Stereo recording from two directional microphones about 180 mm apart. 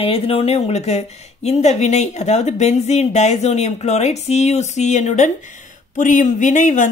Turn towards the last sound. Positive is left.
turn(degrees=45)  # may be behind; listen again after turning